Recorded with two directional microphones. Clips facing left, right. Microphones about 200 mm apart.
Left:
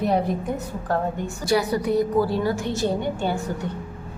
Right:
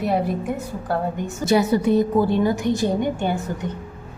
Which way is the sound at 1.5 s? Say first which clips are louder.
Right 4 dB; 25° right (ahead or behind).